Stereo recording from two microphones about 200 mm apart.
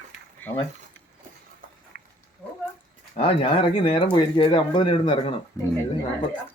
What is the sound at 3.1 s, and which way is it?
Speech, 25° left (ahead or behind).